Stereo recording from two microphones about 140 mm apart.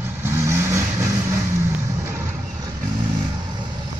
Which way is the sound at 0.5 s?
20° right (ahead or behind).